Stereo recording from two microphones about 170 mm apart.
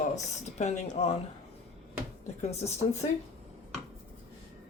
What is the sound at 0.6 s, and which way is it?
Speech, 40° left (ahead or behind).